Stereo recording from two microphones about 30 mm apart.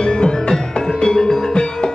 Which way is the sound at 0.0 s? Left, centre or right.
Left.